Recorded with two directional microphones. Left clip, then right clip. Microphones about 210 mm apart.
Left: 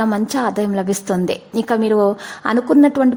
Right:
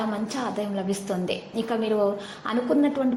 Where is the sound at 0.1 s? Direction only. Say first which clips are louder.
Left 10 dB; 40° left (ahead or behind).